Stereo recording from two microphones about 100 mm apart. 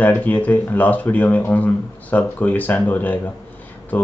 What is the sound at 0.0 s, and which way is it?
Speech, 15° left (ahead or behind).